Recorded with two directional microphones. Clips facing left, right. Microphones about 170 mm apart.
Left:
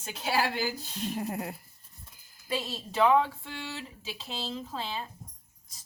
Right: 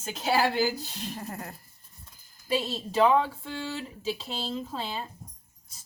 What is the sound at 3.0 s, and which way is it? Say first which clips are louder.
Speech: right 1 dB; 35° right (ahead or behind).